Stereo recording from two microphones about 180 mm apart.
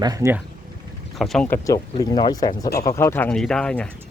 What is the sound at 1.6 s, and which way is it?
Speech, 20° left (ahead or behind).